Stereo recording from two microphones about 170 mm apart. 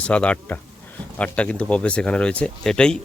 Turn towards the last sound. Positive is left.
turn(degrees=5)  # may be behind; listen again after turning